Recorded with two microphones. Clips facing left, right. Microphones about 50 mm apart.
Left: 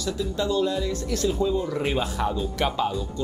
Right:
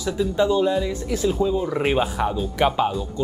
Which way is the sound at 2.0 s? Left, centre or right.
Centre.